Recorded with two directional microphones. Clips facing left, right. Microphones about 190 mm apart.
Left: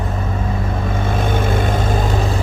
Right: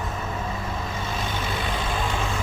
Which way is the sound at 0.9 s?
55° left (ahead or behind).